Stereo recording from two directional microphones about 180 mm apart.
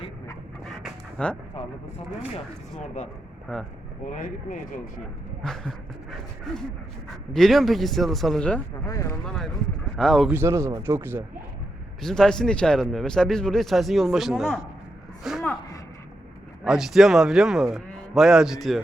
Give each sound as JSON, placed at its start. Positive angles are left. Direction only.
{"t": 0.6, "sound": "pant", "side_deg": 5}
{"t": 4.0, "sound": "speech", "side_deg": 45}
{"t": 5.4, "sound": "a man's voice", "side_deg": 5}
{"t": 8.9, "sound": "speech", "side_deg": 20}
{"t": 9.2, "sound": "a man's voice", "side_deg": 5}
{"t": 10.3, "sound": "speech", "side_deg": -15}
{"t": 12.0, "sound": "a man's voice", "side_deg": 5}
{"t": 16.6, "sound": "a man's voice", "side_deg": 0}